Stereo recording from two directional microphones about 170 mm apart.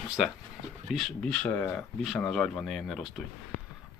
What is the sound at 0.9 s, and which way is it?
Speech, centre (ahead or behind).